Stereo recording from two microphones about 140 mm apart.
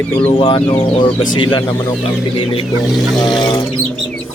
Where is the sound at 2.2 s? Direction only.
40° left (ahead or behind).